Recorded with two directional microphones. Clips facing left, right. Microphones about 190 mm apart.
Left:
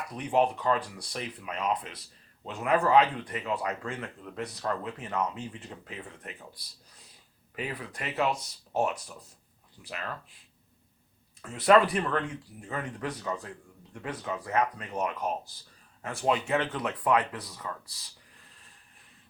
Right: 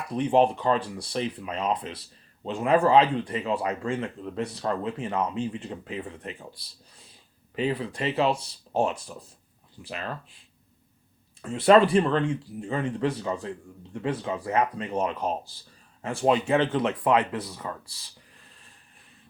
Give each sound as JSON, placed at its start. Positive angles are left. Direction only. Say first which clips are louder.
{"t": 0.1, "sound": "speech", "louder": "right 5 dB", "side_deg": -30}
{"t": 11.4, "sound": "speech", "louder": "right 4 dB", "side_deg": -30}